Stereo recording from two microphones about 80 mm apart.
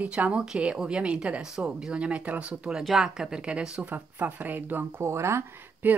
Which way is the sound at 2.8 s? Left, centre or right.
Centre.